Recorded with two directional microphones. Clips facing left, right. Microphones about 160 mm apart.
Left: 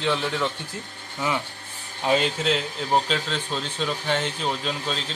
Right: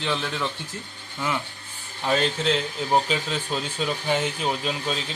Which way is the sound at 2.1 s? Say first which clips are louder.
Right 1 dB; centre (ahead or behind).